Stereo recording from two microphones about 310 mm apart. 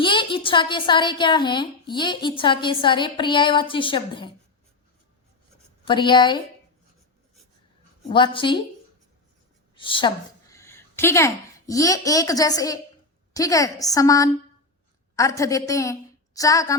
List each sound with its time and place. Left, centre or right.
0.0 s a woman's voice: centre
5.8 s a woman's voice: centre
8.0 s a woman's voice: centre
9.7 s a woman's voice: centre